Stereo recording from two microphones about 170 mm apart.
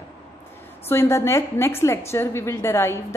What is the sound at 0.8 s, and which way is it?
A woman's voice, 15° left (ahead or behind).